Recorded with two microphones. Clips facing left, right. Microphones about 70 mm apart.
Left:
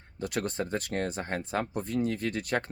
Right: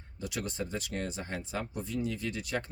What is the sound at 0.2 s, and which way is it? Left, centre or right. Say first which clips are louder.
Speech: left 5 dB; left.